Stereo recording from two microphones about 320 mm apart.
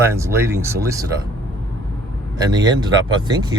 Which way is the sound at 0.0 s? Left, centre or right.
Centre.